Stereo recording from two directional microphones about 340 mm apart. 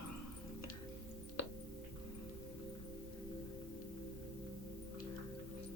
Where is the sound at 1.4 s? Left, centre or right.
Left.